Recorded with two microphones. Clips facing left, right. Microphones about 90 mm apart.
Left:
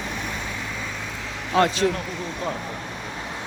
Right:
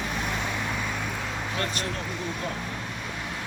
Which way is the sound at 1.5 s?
90° left.